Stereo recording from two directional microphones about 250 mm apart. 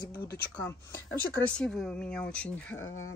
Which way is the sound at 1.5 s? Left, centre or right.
Centre.